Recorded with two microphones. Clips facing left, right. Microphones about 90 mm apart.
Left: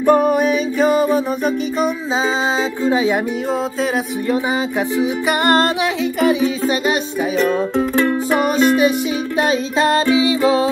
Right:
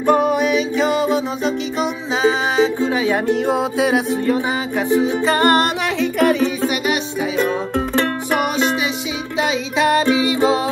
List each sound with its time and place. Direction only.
0.1 s music: 45° left (ahead or behind)
2.2 s music: 20° left (ahead or behind)
3.4 s music: 5° right (ahead or behind)
5.0 s music: 15° left (ahead or behind)
5.9 s music: 65° right (ahead or behind)
9.8 s music: 20° right (ahead or behind)